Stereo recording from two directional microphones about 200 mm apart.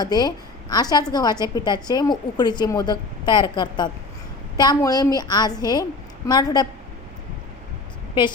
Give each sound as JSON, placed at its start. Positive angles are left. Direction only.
{"t": 0.0, "sound": "a woman's voice", "side_deg": 20}